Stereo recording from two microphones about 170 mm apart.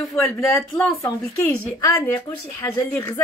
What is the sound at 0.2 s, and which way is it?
Speech, 10° left (ahead or behind).